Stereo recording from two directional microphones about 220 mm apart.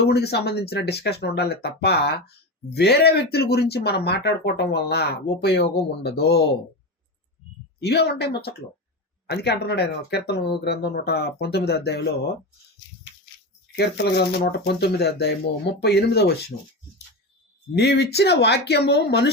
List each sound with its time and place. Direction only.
0.1 s speech: 45° left (ahead or behind)
7.8 s speech: 50° left (ahead or behind)
13.7 s speech: 50° left (ahead or behind)
16.5 s speech: 30° left (ahead or behind)
17.7 s speech: 50° left (ahead or behind)